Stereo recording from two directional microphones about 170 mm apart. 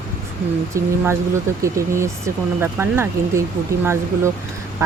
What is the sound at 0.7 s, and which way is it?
Speech, 15° right (ahead or behind).